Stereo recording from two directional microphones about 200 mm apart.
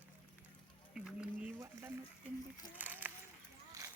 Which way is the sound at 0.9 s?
5° right (ahead or behind).